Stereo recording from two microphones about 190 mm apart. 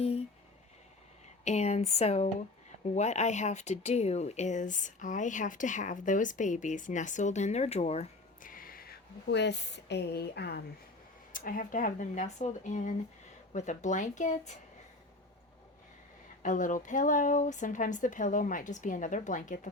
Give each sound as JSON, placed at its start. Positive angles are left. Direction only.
{"t": 1.5, "sound": "speech", "side_deg": 35}
{"t": 11.3, "sound": "a woman's voice", "side_deg": 45}
{"t": 16.4, "sound": "a woman's voice", "side_deg": 40}